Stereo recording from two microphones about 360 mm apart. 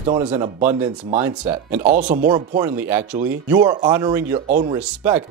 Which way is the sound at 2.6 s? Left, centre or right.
Centre.